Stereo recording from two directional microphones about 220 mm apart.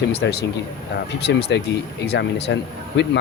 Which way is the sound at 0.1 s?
45° left (ahead or behind).